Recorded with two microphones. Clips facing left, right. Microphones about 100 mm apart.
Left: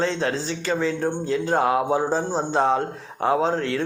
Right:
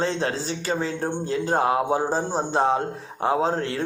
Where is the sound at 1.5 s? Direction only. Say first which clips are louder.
Left 1 dB; 30° right (ahead or behind).